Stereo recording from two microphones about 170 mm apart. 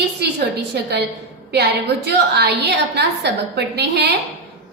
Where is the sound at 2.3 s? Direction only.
75° right (ahead or behind).